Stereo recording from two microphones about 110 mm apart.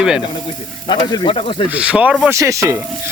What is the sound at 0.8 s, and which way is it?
Speech, 45° left (ahead or behind).